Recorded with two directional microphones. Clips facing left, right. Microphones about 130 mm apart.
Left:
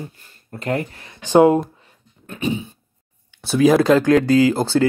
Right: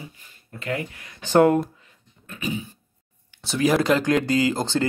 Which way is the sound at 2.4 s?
25° left (ahead or behind).